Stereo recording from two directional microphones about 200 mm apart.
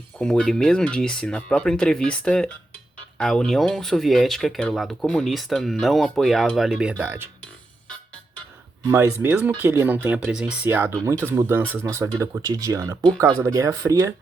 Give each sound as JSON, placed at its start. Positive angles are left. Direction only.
{"t": 0.2, "sound": "speech", "side_deg": 5}
{"t": 8.9, "sound": "speech", "side_deg": -15}